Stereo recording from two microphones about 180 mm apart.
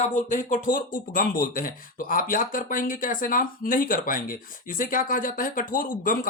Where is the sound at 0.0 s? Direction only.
40° left (ahead or behind).